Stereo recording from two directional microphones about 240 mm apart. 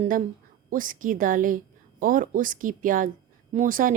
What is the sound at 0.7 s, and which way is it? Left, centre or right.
A woman's voice, right.